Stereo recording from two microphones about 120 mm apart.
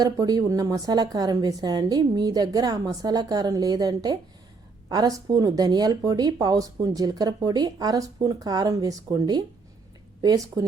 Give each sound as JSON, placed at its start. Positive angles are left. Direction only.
{"t": 0.0, "sound": "speech", "side_deg": -30}